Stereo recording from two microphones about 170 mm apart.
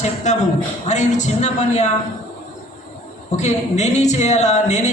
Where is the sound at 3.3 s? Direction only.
45° left (ahead or behind).